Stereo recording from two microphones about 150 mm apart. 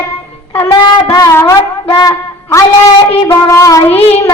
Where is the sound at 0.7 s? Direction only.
25° left (ahead or behind).